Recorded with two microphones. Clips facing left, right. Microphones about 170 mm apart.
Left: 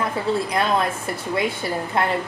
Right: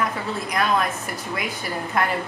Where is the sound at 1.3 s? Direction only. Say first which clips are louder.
Left 6 dB; 25° left (ahead or behind).